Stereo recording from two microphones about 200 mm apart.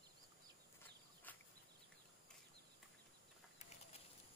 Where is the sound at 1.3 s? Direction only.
10° left (ahead or behind).